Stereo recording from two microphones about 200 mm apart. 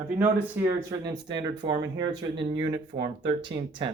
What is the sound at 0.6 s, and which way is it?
Speech, 20° right (ahead or behind).